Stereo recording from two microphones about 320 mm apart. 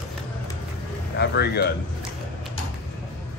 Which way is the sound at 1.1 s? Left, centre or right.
Left.